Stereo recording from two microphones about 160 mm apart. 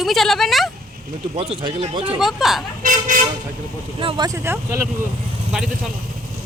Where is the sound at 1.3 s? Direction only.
35° right (ahead or behind).